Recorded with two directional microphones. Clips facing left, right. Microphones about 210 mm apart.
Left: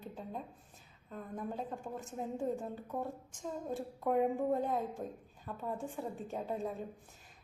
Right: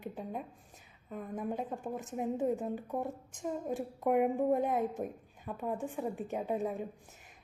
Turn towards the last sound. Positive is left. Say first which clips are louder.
# right 4 dB
turn(degrees=-15)  # may be behind; listen again after turning